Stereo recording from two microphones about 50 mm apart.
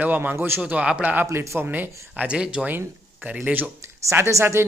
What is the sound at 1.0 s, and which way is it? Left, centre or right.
Speech, right.